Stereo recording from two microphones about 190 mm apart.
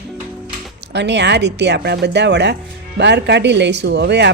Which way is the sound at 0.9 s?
65° right (ahead or behind).